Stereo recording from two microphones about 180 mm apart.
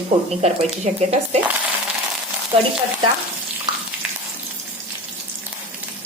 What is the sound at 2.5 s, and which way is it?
Speech, 30° right (ahead or behind).